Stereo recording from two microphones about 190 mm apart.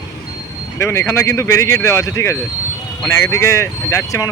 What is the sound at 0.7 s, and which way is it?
Speech, 15° left (ahead or behind).